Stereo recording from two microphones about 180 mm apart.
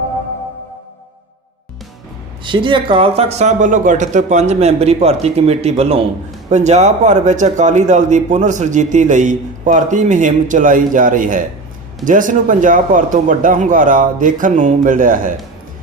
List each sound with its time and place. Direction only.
2.4 s a man's voice: 25° right (ahead or behind); by 15.3 s 50° right (ahead or behind)